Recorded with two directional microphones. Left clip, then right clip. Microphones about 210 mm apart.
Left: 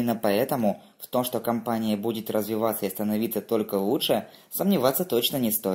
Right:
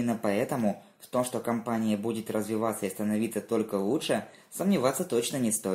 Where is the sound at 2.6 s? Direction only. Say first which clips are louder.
Left 4 dB; 25° left (ahead or behind).